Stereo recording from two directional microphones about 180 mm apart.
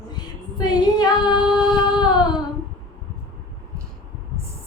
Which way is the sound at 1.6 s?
25° left (ahead or behind).